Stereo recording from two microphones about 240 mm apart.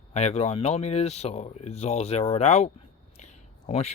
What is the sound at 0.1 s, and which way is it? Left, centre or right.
Speech, left.